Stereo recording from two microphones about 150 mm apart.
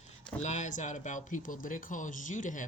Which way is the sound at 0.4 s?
55° left (ahead or behind).